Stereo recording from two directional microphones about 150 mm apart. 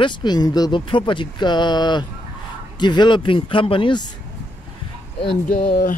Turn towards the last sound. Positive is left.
turn(degrees=70)  # may be behind; listen again after turning